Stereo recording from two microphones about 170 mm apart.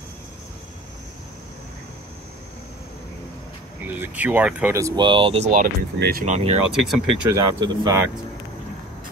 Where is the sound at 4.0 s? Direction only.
10° right (ahead or behind); by 5.5 s 35° right (ahead or behind).